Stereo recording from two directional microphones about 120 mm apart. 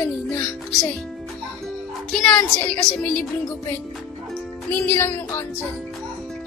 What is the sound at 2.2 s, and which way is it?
A woman's voice, 10° left (ahead or behind).